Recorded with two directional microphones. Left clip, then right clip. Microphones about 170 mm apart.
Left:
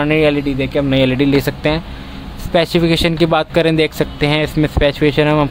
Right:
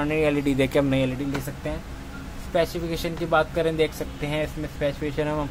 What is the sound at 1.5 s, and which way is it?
Speech, 50° left (ahead or behind).